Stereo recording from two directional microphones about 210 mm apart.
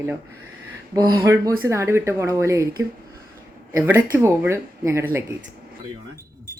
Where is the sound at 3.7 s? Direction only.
10° right (ahead or behind).